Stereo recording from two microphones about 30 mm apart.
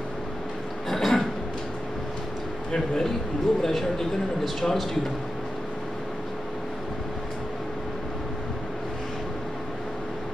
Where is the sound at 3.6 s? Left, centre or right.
Centre.